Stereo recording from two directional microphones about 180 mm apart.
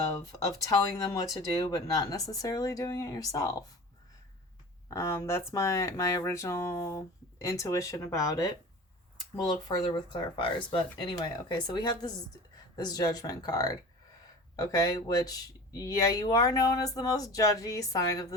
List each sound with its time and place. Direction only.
0.9 s speech: 20° left (ahead or behind)
4.9 s speech: 15° left (ahead or behind)